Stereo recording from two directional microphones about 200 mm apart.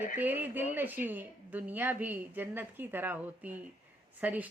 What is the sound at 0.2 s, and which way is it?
A woman's voice, 10° right (ahead or behind).